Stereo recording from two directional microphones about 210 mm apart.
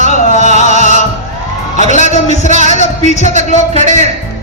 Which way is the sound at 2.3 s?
35° left (ahead or behind).